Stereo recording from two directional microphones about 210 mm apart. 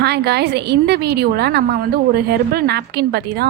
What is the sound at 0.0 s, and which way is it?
A woman's voice, 50° right (ahead or behind).